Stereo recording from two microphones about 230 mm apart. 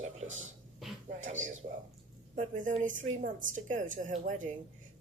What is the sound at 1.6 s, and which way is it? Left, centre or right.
A woman's voice, right.